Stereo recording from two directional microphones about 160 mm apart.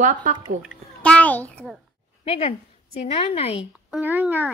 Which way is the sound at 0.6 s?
5° left (ahead or behind).